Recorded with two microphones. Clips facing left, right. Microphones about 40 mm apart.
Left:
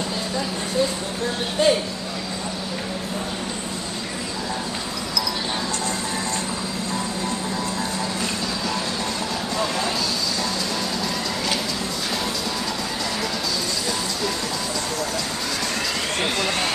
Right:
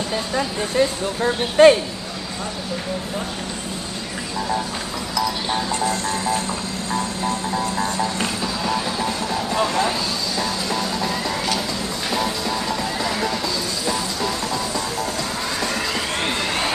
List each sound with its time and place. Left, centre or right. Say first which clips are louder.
0.7 s speech: right 4 dB; right
5.5 s music: right 4 dB; centre
8.7 s vehicle: right 3 dB; centre
12.1 s music: right 6 dB; centre
16.3 s a sound: right 1 dB; right